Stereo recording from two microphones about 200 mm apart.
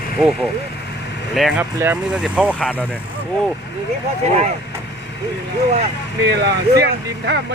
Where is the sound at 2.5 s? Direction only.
5° left (ahead or behind).